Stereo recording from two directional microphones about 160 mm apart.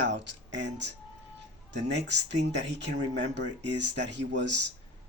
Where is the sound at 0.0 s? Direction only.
90° right.